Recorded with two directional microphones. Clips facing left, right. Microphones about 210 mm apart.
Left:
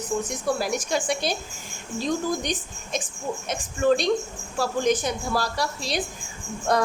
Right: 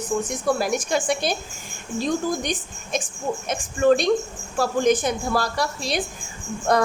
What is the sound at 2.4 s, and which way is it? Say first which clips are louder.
Speech: right 2 dB; 50° right (ahead or behind).